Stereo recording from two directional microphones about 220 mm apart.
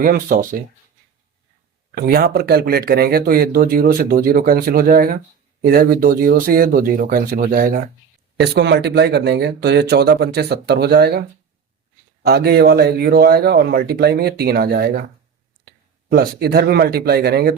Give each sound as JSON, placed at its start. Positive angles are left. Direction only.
{"t": 0.0, "sound": "speech", "side_deg": -40}
{"t": 2.0, "sound": "speech", "side_deg": -40}
{"t": 8.4, "sound": "speech", "side_deg": -50}
{"t": 16.0, "sound": "speech", "side_deg": -45}